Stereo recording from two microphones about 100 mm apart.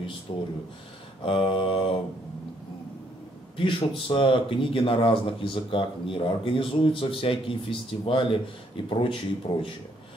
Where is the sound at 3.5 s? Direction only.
65° left (ahead or behind).